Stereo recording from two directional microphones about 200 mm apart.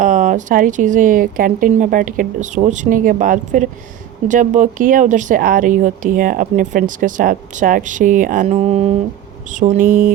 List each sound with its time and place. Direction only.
0.0 s speech: 40° right (ahead or behind)